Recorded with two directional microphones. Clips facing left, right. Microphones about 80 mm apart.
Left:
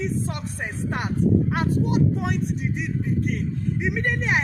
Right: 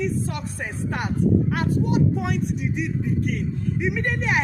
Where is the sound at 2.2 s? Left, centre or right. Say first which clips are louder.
Right 1 dB; left.